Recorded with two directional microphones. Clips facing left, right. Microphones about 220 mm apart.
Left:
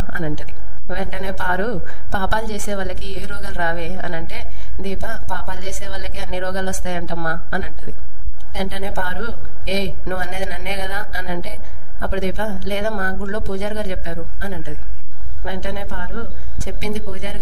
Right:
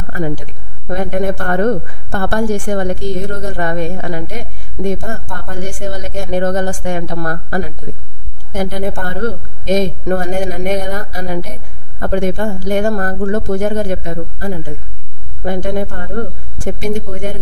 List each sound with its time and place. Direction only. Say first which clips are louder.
0.1 s speech: right 5 dB; 45° right (ahead or behind)